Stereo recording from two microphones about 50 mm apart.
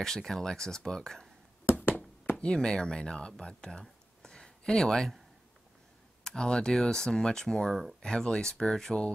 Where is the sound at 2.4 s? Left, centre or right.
Centre.